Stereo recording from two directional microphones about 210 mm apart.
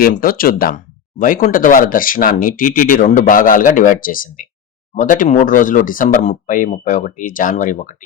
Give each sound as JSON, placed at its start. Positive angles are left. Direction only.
{"t": 0.0, "sound": "speech", "side_deg": 45}